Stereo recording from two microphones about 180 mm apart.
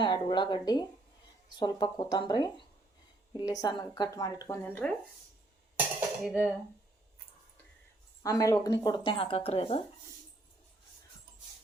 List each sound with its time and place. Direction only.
0.0 s speech: 25° left (ahead or behind)
6.2 s speech: centre (ahead or behind)
8.2 s speech: 20° left (ahead or behind); by 9.8 s 35° left (ahead or behind)